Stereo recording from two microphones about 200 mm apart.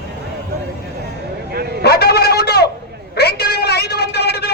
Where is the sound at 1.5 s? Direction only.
50° right (ahead or behind).